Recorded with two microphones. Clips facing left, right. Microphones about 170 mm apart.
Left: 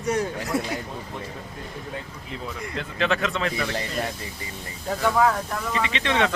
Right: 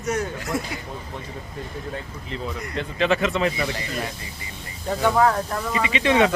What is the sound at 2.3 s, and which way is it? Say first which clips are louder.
Speech: right 3 dB; centre (ahead or behind).